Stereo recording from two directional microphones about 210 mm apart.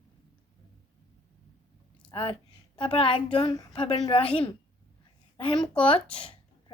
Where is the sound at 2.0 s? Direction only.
25° left (ahead or behind).